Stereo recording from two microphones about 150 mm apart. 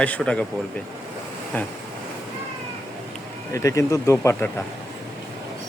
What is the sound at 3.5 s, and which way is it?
Speech, 20° left (ahead or behind).